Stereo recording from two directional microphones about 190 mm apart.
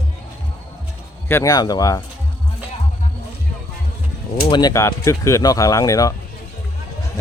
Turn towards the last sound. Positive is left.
turn(degrees=15)  # may be behind; listen again after turning